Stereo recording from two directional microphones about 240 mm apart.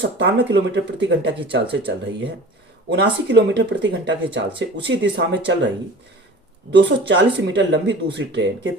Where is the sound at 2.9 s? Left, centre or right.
Right.